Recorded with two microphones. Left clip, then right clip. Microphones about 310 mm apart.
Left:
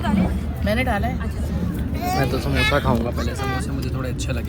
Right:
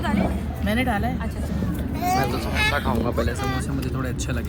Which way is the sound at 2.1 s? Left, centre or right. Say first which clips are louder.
Even; centre.